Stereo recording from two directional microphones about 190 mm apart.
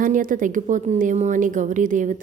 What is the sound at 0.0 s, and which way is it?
A woman's voice, 45° right (ahead or behind).